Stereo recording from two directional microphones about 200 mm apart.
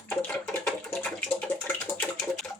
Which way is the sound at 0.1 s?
5° left (ahead or behind).